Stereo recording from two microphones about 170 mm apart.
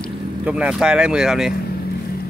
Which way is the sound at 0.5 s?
5° right (ahead or behind).